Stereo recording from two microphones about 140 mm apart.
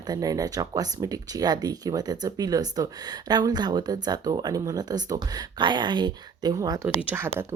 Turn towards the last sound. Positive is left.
turn(degrees=-10)  # may be behind; listen again after turning